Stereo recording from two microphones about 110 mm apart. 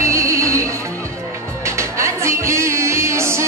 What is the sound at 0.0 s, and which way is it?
Music, 25° right (ahead or behind).